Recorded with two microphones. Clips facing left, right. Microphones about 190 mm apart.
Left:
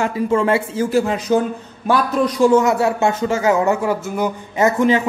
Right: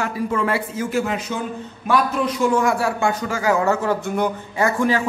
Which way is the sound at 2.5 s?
20° left (ahead or behind).